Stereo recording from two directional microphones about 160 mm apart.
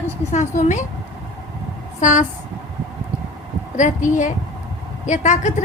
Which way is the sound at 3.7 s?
50° left (ahead or behind).